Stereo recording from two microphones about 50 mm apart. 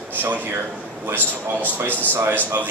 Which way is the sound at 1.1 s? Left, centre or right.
Right.